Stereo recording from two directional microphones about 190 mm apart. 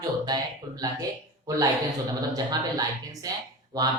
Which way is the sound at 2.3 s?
20° right (ahead or behind).